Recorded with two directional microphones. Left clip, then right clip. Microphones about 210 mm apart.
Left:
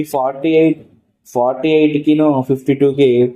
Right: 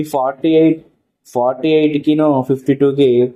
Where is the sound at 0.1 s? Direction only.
15° right (ahead or behind).